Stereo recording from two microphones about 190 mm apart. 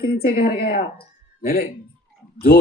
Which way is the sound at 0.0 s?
55° left (ahead or behind).